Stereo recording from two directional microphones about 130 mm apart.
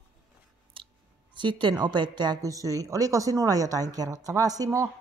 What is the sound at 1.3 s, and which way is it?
A woman's voice, 40° right (ahead or behind).